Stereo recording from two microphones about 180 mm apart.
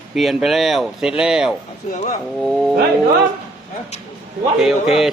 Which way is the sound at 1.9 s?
40° left (ahead or behind).